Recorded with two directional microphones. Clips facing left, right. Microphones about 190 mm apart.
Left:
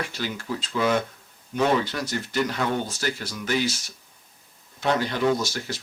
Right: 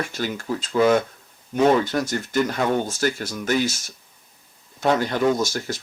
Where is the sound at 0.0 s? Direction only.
45° right (ahead or behind).